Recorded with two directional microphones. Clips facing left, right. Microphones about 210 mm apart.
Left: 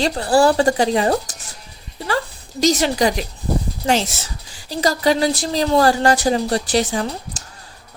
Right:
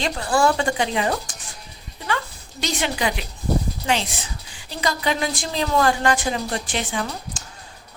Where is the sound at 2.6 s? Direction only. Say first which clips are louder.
Left 8 dB; 40° left (ahead or behind).